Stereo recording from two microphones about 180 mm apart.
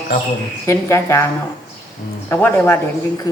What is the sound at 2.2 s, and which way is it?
Speech, 10° left (ahead or behind).